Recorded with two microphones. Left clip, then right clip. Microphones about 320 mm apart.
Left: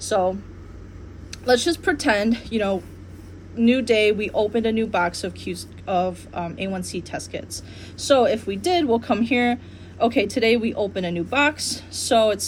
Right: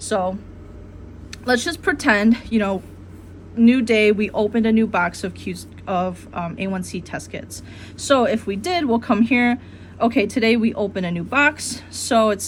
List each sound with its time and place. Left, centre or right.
1.3 s speech: right